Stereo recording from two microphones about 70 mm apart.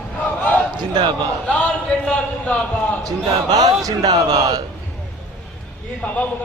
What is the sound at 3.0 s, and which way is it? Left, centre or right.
Speech, right.